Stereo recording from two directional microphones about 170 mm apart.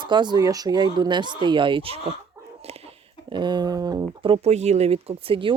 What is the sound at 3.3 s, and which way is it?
Speech, 25° right (ahead or behind).